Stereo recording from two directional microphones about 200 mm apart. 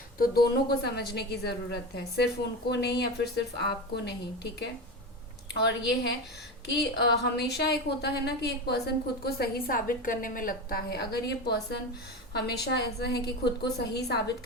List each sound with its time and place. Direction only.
0.2 s a woman's voice: 50° left (ahead or behind)
5.5 s a woman's voice: 55° left (ahead or behind)